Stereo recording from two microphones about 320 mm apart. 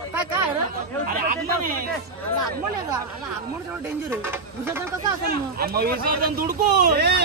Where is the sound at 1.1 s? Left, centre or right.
Right.